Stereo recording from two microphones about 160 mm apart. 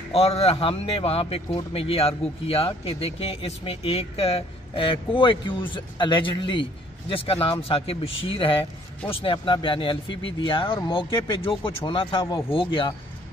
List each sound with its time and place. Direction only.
0.1 s a man's voice: 40° left (ahead or behind)